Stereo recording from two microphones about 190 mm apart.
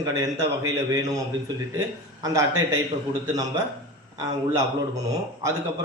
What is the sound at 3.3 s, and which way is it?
A man's voice, 20° right (ahead or behind).